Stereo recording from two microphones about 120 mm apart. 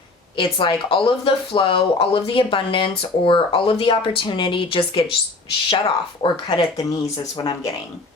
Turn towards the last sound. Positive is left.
turn(degrees=35)  # may be behind; listen again after turning